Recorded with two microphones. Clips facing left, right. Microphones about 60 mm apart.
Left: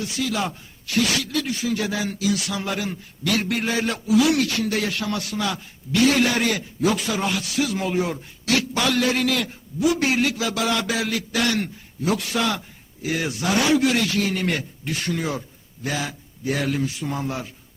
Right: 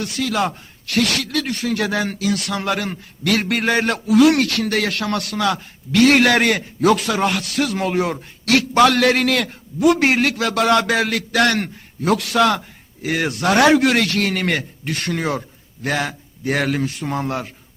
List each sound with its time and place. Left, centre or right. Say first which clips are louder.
0.0 s speech: right 4 dB; right